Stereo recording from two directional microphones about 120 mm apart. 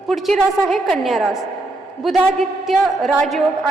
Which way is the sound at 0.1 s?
5° left (ahead or behind).